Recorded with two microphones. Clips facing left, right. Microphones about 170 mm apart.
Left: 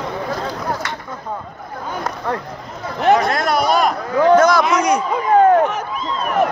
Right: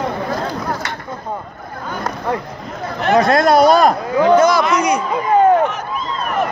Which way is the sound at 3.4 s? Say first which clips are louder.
Right 6 dB; 35° right (ahead or behind).